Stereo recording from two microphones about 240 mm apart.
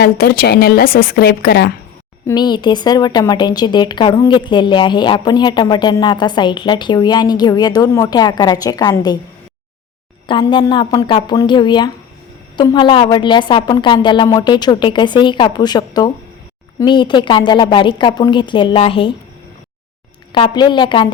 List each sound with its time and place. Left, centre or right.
0.0 s a woman's voice: left
2.2 s a woman's voice: centre
10.2 s a woman's voice: centre
20.3 s a woman's voice: centre